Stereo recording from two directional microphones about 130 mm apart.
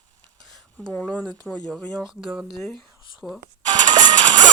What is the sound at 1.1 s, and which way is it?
Speech, 10° right (ahead or behind).